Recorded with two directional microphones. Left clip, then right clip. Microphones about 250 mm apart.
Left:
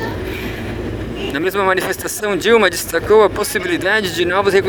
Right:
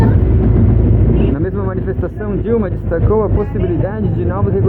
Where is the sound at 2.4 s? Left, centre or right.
Left.